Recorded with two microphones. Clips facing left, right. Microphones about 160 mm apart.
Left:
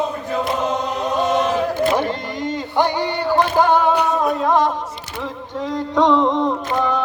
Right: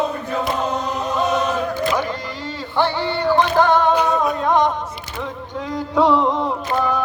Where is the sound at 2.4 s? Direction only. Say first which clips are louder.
Left 2 dB; 20° left (ahead or behind); by 4.7 s centre (ahead or behind).